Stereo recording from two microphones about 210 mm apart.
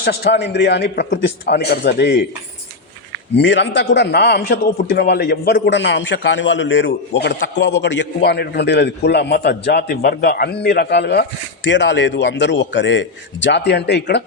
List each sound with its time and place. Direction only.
0.0 s a man's voice: 50° left (ahead or behind)
3.3 s a man's voice: 60° left (ahead or behind)